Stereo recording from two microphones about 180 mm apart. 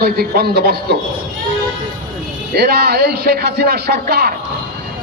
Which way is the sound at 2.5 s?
60° right (ahead or behind).